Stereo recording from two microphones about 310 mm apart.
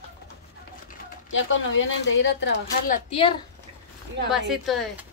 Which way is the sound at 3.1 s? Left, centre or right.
Centre.